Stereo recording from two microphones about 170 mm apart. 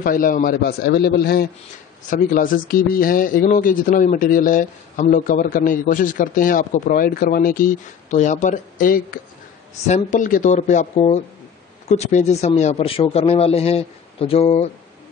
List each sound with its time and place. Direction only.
0.0 s a man's voice: 55° left (ahead or behind); by 14.7 s 35° left (ahead or behind)